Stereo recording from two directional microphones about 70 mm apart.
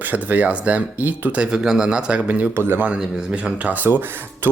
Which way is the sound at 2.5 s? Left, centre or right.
Right.